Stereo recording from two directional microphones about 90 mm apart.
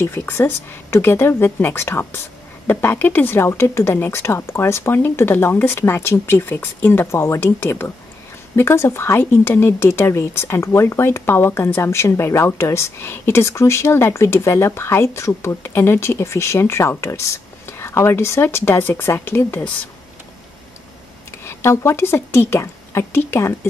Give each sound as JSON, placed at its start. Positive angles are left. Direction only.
{"t": 0.0, "sound": "speech", "side_deg": 25}
{"t": 21.3, "sound": "speech", "side_deg": 30}